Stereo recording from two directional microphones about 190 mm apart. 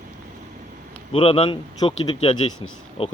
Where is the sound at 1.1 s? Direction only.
30° left (ahead or behind).